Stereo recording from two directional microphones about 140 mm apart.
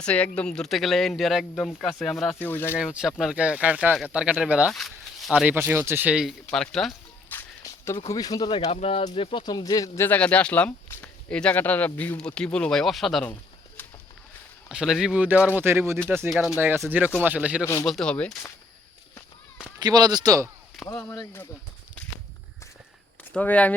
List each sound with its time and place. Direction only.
0.0 s speech: 10° left (ahead or behind)
2.3 s speech: 15° left (ahead or behind)
2.7 s speech: 5° right (ahead or behind)
4.7 s speech: 5° left (ahead or behind)
5.3 s speech: 10° right (ahead or behind)
6.5 s speech: 5° left (ahead or behind)
7.3 s walk: 15° left (ahead or behind)
8.1 s speech: 25° left (ahead or behind)
8.6 s speech: 45° left (ahead or behind); by 13.2 s centre (ahead or behind)
14.7 s speech: 5° right (ahead or behind)
17.8 s speech: 5° left (ahead or behind)
19.8 s speech: 30° right (ahead or behind)
20.8 s speech: 25° left (ahead or behind)
23.3 s speech: 10° left (ahead or behind)